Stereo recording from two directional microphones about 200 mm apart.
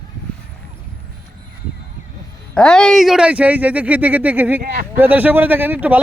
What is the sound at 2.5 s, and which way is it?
Speech, 5° left (ahead or behind).